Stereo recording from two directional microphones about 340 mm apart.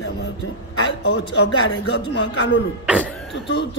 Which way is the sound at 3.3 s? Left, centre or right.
Left.